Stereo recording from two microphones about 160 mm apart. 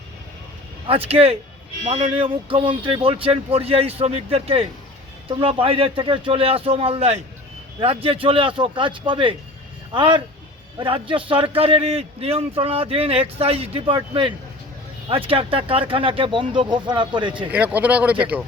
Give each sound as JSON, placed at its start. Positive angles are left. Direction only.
{"t": 0.9, "sound": "a man's voice", "side_deg": -35}
{"t": 17.5, "sound": "speech", "side_deg": -10}